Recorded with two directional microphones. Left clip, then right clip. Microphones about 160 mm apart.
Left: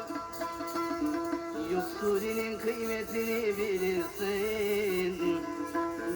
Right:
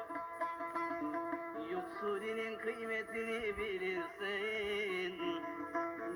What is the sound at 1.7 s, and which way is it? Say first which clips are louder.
Music: left 10 dB; 30° right (ahead or behind).